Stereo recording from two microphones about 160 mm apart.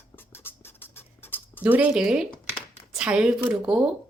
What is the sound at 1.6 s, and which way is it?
Speech, 10° right (ahead or behind).